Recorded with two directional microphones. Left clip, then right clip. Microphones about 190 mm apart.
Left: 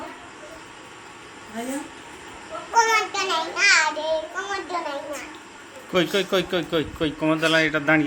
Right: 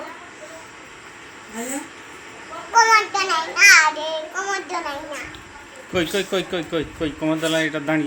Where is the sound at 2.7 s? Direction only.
5° left (ahead or behind).